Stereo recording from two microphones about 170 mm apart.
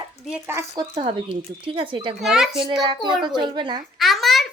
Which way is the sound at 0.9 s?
30° right (ahead or behind).